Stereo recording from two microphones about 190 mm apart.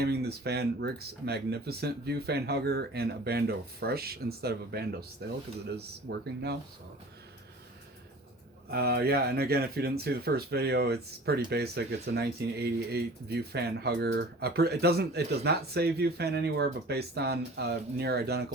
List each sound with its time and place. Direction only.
0.0 s speech: 60° right (ahead or behind)
8.7 s speech: 55° right (ahead or behind)